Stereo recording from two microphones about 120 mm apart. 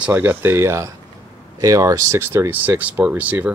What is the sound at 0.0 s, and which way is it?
Speech, 15° right (ahead or behind).